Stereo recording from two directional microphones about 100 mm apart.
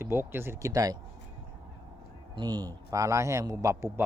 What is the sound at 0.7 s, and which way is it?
Speech, 35° right (ahead or behind).